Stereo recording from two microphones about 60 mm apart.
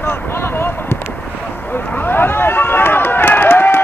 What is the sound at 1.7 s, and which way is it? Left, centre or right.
Run, left.